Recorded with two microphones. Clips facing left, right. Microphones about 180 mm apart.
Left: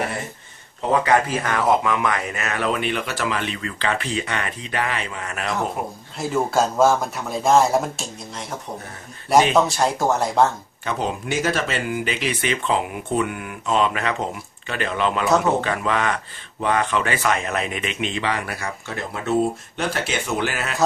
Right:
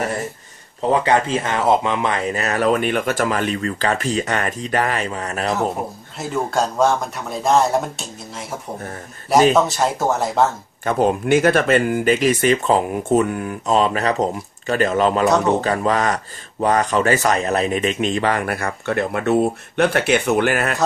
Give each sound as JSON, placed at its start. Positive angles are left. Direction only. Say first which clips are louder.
{"t": 1.0, "sound": "speech", "louder": "right 2 dB", "side_deg": -25}
{"t": 6.1, "sound": "speech", "louder": "left 1 dB", "side_deg": 0}
{"t": 10.8, "sound": "a man's voice", "louder": "right 8 dB", "side_deg": -50}